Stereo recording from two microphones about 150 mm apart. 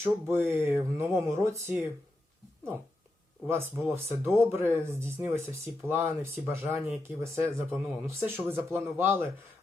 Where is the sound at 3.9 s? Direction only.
15° right (ahead or behind).